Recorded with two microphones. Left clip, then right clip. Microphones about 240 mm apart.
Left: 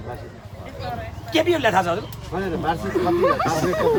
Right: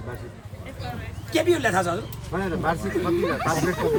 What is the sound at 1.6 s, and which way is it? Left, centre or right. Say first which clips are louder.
Speech: left 4 dB; left.